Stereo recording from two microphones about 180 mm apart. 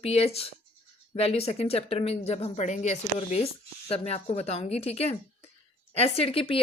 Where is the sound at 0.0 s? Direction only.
35° left (ahead or behind).